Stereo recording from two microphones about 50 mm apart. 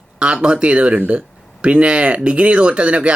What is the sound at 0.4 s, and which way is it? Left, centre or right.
Speech, right.